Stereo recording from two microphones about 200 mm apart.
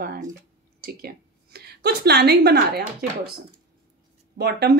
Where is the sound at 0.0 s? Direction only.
50° right (ahead or behind).